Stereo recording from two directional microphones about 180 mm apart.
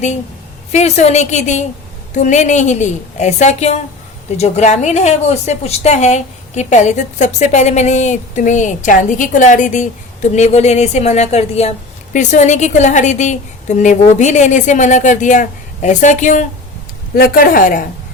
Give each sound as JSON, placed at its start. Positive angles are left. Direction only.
{"t": 0.7, "sound": "a woman's voice", "side_deg": 40}
{"t": 17.2, "sound": "a woman's voice", "side_deg": 55}